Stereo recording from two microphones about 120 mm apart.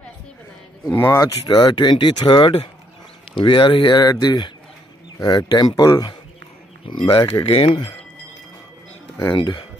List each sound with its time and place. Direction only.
0.8 s speech: 20° left (ahead or behind)
1.2 s speech: 35° left (ahead or behind)
9.4 s speech: 40° left (ahead or behind)